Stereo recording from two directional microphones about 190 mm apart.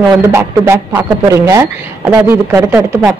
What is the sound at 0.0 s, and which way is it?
A man's voice, 15° right (ahead or behind).